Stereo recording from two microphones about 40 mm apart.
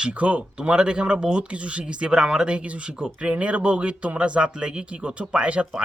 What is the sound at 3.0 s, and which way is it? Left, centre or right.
Speech, right.